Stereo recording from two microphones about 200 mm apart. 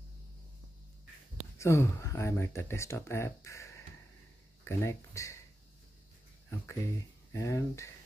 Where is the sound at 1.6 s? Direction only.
15° left (ahead or behind).